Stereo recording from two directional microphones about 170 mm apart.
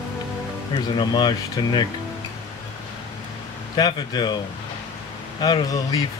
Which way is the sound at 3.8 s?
25° left (ahead or behind).